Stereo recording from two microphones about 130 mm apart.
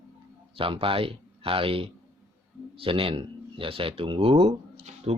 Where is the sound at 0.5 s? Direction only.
45° right (ahead or behind).